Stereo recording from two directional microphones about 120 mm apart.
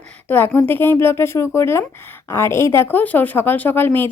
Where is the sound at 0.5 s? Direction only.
15° left (ahead or behind).